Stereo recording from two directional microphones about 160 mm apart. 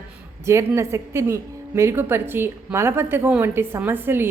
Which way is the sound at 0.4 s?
15° right (ahead or behind).